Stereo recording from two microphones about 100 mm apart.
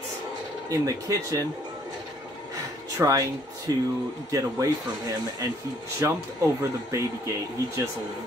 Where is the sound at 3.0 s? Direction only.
35° right (ahead or behind).